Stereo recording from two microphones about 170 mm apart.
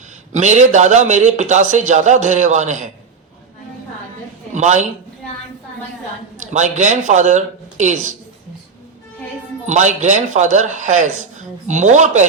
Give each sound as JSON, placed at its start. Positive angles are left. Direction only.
{"t": 0.3, "sound": "a man's voice", "side_deg": -45}
{"t": 4.5, "sound": "a man's voice", "side_deg": -45}
{"t": 6.5, "sound": "a man's voice", "side_deg": -45}
{"t": 9.6, "sound": "a man's voice", "side_deg": -45}